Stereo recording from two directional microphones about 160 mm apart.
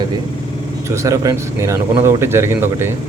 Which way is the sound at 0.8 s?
20° right (ahead or behind).